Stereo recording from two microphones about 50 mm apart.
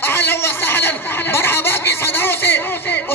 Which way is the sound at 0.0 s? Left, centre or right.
Left.